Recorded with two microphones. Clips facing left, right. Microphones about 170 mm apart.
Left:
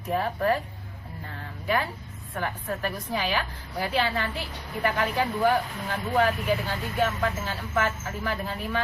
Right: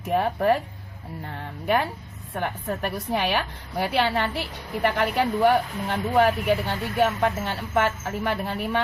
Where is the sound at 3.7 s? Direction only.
70° right (ahead or behind).